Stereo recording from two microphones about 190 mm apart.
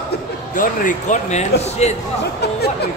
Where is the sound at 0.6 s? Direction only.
40° left (ahead or behind).